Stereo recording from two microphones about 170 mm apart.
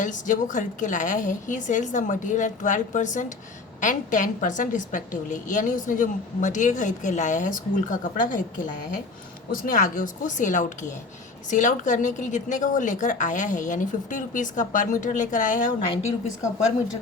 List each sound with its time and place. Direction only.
0.0 s a woman's voice: 50° left (ahead or behind)